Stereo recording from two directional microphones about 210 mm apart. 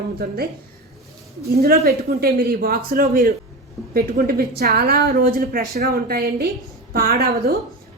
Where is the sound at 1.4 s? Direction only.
50° right (ahead or behind).